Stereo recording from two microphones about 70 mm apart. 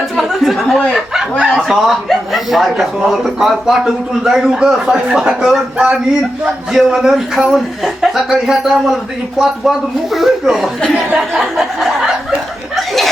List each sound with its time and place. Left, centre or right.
0.2 s speech: centre
10.8 s speech: centre
11.3 s a sound: centre
12.7 s chuckle: centre